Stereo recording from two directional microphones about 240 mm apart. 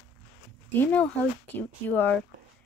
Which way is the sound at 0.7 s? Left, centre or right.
Centre.